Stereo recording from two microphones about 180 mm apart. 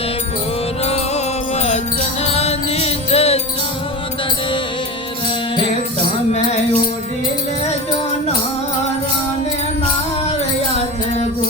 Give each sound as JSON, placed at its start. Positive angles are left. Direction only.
{"t": 0.9, "sound": "music", "side_deg": 35}
{"t": 10.8, "sound": "music", "side_deg": 40}